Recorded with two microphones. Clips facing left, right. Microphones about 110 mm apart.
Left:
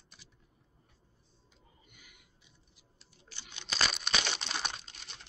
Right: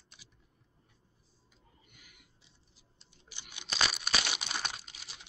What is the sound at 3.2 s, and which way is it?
Crumpling, 15° right (ahead or behind).